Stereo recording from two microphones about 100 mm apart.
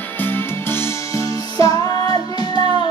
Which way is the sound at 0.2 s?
20° left (ahead or behind).